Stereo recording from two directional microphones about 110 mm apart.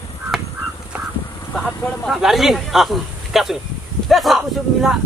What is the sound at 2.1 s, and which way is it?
Speech, centre (ahead or behind).